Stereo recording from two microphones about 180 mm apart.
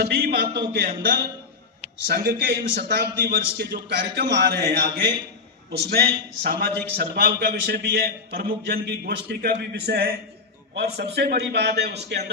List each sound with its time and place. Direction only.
0.0 s a man's voice: 60° right (ahead or behind)